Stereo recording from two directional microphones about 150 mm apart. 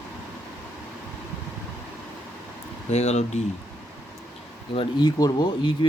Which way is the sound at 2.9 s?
45° left (ahead or behind).